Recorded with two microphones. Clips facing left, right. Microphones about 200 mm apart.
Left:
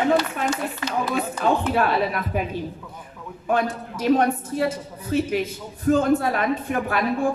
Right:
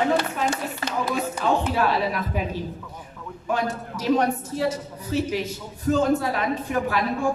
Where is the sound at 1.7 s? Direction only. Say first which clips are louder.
Left 1 dB; 55° left (ahead or behind).